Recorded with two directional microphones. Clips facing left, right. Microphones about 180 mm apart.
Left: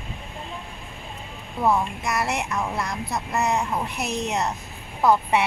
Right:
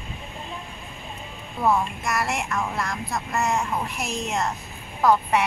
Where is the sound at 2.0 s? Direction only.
20° left (ahead or behind).